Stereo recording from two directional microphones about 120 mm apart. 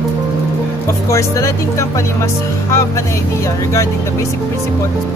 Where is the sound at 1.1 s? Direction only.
25° left (ahead or behind).